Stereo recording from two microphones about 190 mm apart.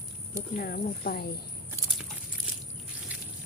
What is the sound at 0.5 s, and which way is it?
Speech, 50° left (ahead or behind).